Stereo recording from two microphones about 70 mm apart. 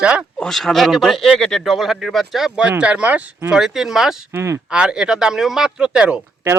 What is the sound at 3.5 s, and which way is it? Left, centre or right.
Speech, centre.